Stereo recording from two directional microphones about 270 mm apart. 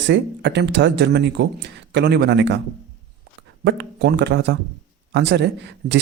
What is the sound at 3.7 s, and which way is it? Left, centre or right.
Speech, right.